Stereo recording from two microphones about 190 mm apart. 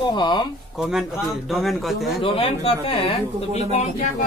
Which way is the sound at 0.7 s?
5° right (ahead or behind).